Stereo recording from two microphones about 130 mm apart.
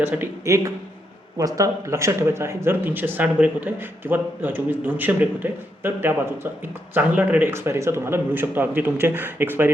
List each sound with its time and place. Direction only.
0.0 s speech: 15° right (ahead or behind)